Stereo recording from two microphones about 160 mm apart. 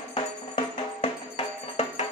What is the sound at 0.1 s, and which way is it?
Music, 35° left (ahead or behind).